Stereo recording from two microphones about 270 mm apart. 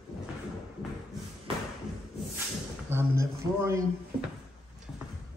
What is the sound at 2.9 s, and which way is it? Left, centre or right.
Speech, centre.